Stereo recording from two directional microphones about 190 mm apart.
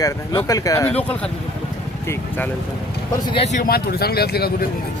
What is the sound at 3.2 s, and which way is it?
Speech, 30° left (ahead or behind).